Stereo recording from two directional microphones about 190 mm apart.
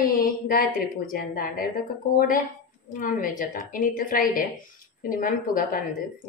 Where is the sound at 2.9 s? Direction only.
45° left (ahead or behind).